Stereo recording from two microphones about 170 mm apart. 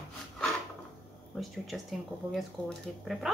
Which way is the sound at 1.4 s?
Centre (ahead or behind).